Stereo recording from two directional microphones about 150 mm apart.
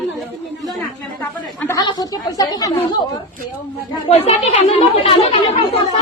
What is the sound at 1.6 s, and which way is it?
Speech, 25° left (ahead or behind).